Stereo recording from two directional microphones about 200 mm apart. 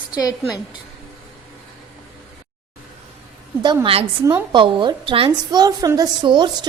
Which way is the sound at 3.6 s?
20° right (ahead or behind).